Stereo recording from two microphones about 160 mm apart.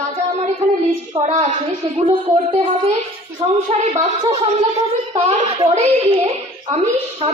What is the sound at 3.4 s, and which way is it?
Speech, 35° right (ahead or behind).